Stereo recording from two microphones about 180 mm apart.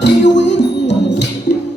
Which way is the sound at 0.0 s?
75° left (ahead or behind).